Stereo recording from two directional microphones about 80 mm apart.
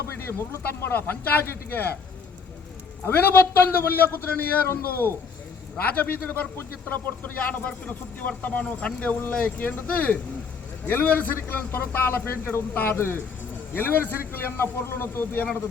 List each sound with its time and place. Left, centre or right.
0.6 s a man's voice: left
3.0 s a man's voice: left